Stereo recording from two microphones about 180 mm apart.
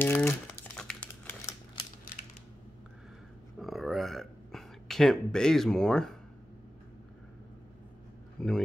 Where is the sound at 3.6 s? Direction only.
Centre (ahead or behind).